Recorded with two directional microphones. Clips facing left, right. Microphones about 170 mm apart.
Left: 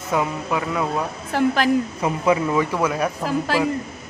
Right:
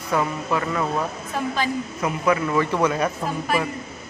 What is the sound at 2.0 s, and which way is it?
Speech, 25° left (ahead or behind).